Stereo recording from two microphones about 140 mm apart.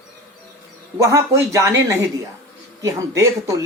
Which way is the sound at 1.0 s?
20° right (ahead or behind).